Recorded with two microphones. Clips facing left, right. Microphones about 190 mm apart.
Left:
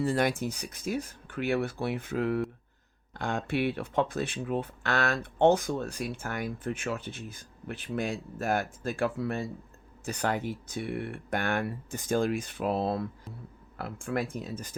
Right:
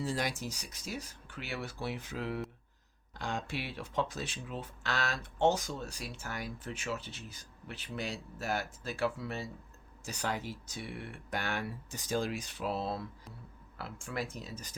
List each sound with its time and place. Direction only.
0.0 s speech: 55° left (ahead or behind)